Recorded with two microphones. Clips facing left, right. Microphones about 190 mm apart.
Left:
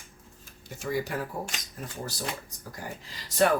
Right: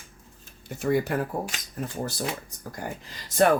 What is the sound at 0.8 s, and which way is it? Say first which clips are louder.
Speech: right 6 dB; 55° right (ahead or behind).